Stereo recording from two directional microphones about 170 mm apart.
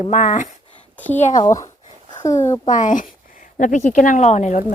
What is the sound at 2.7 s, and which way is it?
A woman's voice, 50° left (ahead or behind).